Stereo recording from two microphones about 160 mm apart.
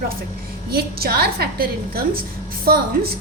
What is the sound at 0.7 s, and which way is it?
A woman's voice, 75° right (ahead or behind).